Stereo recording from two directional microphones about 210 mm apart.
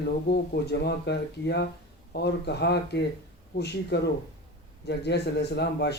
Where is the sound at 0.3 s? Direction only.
50° left (ahead or behind).